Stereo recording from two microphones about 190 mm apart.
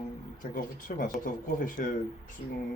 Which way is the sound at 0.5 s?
45° left (ahead or behind).